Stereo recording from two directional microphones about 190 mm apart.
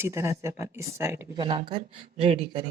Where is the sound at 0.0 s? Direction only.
15° right (ahead or behind).